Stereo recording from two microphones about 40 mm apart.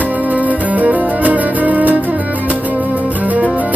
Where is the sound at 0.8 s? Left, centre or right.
Right.